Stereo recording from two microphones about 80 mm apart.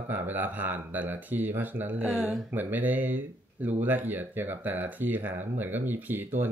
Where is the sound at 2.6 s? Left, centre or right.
Right.